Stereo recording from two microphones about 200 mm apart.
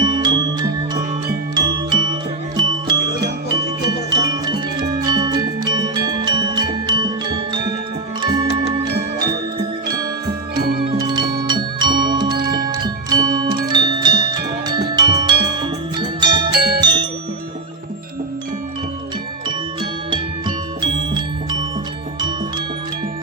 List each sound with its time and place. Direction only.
0.0 s music: 20° right (ahead or behind)
4.1 s music: 20° right (ahead or behind)
8.2 s music: 20° right (ahead or behind)
10.9 s music: 20° right (ahead or behind)
16.3 s music: 55° right (ahead or behind)
20.8 s music: 20° right (ahead or behind)